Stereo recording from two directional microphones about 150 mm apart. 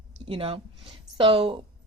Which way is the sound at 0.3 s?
40° right (ahead or behind).